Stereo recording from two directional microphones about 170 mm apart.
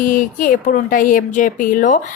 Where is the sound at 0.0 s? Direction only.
50° left (ahead or behind).